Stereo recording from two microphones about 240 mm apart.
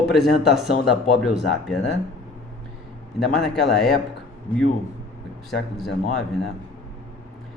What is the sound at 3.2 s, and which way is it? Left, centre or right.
Speech, centre.